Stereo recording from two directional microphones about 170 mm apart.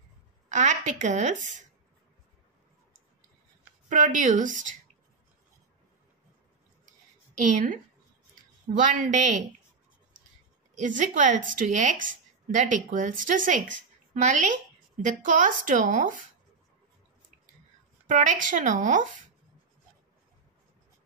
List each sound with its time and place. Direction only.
0.5 s speech: 45° right (ahead or behind)
3.9 s speech: 50° right (ahead or behind)
7.3 s speech: 50° right (ahead or behind)
10.7 s speech: 50° right (ahead or behind)
18.0 s speech: 50° right (ahead or behind)